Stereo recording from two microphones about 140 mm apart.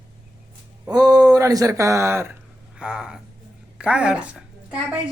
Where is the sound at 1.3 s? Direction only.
25° right (ahead or behind).